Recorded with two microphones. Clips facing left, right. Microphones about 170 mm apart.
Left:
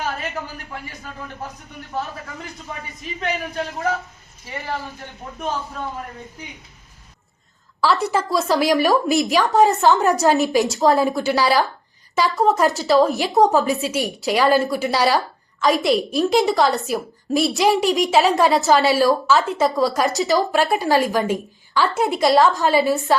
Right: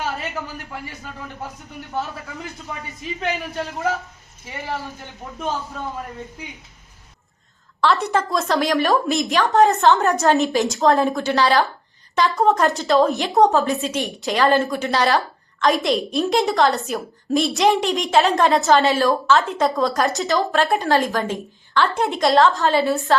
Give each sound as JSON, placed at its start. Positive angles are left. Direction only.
{"t": 0.0, "sound": "a man's voice", "side_deg": 0}
{"t": 3.2, "sound": "a woman's voice", "side_deg": -5}
{"t": 7.8, "sound": "a woman's voice", "side_deg": 0}
{"t": 22.5, "sound": "a woman's voice", "side_deg": 15}
{"t": 22.8, "sound": "a woman's voice", "side_deg": 0}